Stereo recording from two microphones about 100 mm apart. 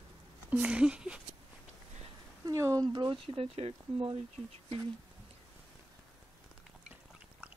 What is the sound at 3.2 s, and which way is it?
Speech, 75° right (ahead or behind).